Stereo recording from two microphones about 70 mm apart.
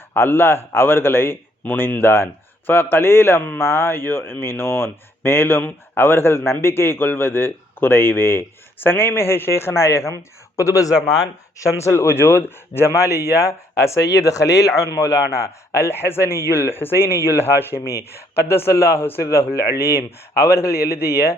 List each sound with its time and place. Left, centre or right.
0.1 s speech: left